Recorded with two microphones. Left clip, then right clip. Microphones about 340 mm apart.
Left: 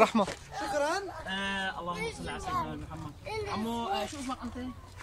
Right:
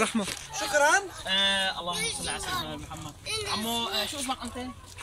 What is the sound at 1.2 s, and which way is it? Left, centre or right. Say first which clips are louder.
Speech: right 8 dB; centre.